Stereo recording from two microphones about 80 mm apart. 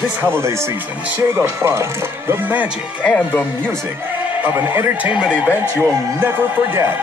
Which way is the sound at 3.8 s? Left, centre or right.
Right.